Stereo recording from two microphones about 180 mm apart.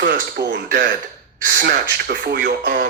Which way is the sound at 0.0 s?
70° right (ahead or behind).